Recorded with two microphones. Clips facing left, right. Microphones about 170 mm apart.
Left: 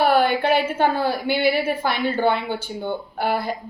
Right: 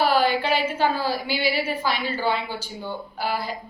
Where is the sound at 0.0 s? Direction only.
55° left (ahead or behind).